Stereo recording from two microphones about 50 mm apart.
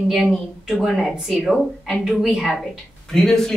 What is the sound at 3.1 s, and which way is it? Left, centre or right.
Speech, centre.